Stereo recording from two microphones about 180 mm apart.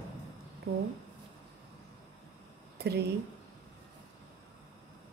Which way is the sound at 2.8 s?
60° right (ahead or behind).